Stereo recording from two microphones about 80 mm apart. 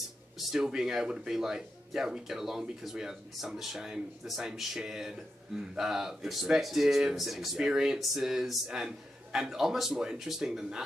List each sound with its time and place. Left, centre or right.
0.5 s speech: centre